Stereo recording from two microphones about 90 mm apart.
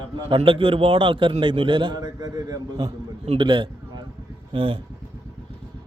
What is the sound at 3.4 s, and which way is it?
Speech, 60° right (ahead or behind).